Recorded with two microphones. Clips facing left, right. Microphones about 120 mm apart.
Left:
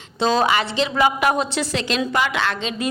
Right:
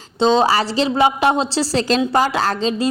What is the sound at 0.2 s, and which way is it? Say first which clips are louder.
Speech: right 4 dB; 25° right (ahead or behind).